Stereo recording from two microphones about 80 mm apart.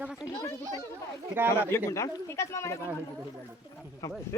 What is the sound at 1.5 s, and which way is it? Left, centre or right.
Speech, left.